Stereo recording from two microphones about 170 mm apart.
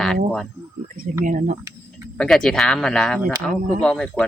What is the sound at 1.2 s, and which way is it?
Speech, 50° right (ahead or behind).